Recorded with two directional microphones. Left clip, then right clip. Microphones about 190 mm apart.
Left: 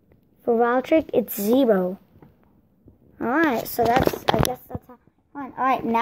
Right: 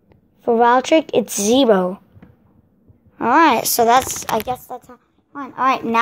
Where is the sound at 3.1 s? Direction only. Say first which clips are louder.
Right 9 dB; 65° right (ahead or behind).